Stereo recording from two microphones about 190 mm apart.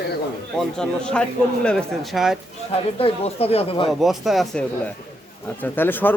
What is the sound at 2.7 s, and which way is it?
Speech, 30° left (ahead or behind).